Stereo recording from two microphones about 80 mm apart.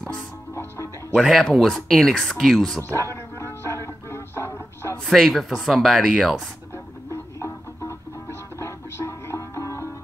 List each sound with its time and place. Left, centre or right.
1.1 s speech: centre
2.8 s music: left
5.0 s speech: centre
7.1 s music: left